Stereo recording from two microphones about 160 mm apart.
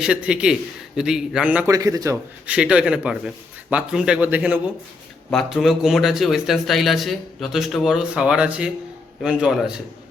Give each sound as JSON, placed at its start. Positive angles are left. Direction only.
{"t": 0.0, "sound": "speech", "side_deg": -5}
{"t": 1.6, "sound": "a man's voice", "side_deg": -20}
{"t": 2.5, "sound": "speech", "side_deg": -5}
{"t": 5.3, "sound": "speech", "side_deg": 0}